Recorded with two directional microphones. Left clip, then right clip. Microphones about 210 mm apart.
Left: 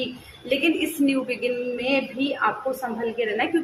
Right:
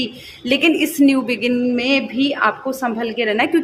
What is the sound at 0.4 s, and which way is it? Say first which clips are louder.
A woman's voice: right 6 dB; 55° right (ahead or behind).